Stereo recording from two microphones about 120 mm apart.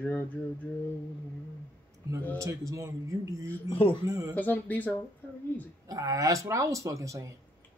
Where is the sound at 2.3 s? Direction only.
25° right (ahead or behind).